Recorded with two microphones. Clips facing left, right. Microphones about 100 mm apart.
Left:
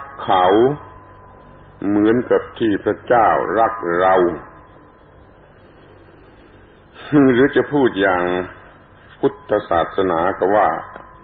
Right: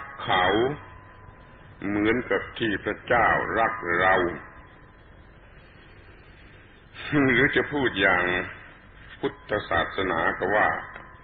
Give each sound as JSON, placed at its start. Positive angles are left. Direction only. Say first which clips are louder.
{"t": 0.0, "sound": "a man's voice", "louder": "left 9 dB", "side_deg": 35}
{"t": 7.0, "sound": "a sound", "louder": "left 10 dB", "side_deg": 35}
{"t": 7.3, "sound": "a man's voice", "louder": "left 10 dB", "side_deg": 35}